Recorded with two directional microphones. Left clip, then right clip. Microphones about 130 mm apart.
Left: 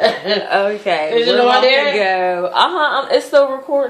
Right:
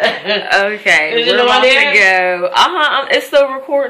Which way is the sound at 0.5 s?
Centre (ahead or behind).